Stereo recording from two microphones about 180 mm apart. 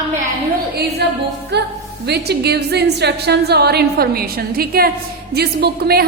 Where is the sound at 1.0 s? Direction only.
70° right (ahead or behind).